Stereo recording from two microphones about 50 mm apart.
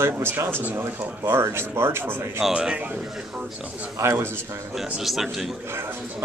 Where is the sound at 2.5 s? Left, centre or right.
Centre.